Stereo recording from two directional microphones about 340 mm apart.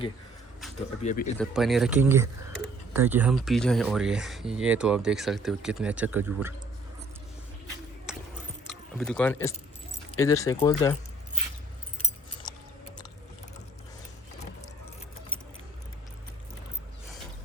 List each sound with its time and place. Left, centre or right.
1.0 s speech: left
1.4 s speech: centre
8.6 s keys jangling: centre
10.2 s speech: centre
11.9 s keys jangling: centre